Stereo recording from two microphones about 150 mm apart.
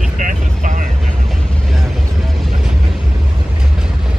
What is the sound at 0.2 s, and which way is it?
Vehicle, 60° right (ahead or behind).